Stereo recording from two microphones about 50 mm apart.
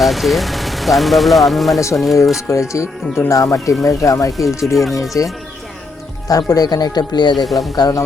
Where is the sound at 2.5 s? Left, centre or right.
Left.